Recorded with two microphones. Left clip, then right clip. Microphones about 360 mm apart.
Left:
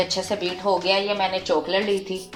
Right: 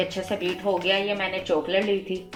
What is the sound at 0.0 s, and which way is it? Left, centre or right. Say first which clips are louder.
Speech: left 3 dB; left.